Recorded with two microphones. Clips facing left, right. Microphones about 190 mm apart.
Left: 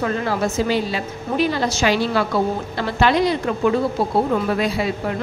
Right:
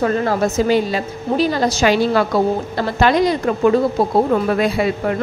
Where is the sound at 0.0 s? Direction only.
45° right (ahead or behind).